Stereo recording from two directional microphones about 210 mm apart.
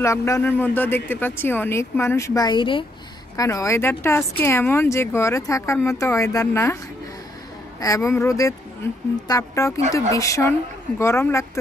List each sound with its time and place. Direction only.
0.0 s speech: 15° left (ahead or behind)
7.8 s speech: 15° left (ahead or behind)